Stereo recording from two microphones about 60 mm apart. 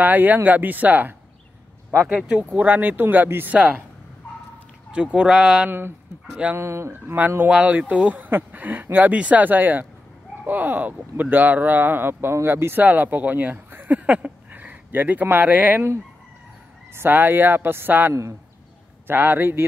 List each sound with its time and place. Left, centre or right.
0.0 s speech: right
2.5 s speech: right
4.9 s speech: centre
5.7 s speech: right
6.5 s speech: right
6.9 s speech: right
12.8 s speech: right
16.9 s speech: right